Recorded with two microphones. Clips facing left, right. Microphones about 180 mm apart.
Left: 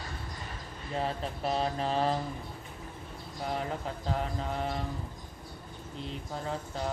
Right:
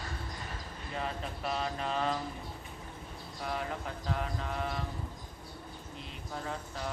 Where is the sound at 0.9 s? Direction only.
35° left (ahead or behind).